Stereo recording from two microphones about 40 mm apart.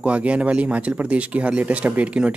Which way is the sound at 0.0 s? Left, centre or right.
Right.